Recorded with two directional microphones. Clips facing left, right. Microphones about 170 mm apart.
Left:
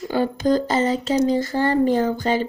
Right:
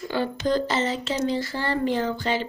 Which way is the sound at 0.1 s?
45° left (ahead or behind).